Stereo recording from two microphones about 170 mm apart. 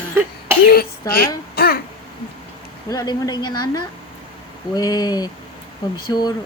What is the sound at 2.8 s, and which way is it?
Speech, 20° left (ahead or behind).